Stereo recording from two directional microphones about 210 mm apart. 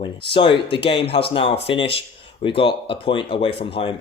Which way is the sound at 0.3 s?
25° left (ahead or behind).